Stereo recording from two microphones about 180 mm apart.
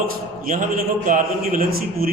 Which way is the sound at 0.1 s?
50° right (ahead or behind).